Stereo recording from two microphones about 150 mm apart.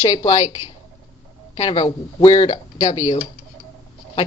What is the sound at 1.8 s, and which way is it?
Speech, 30° left (ahead or behind).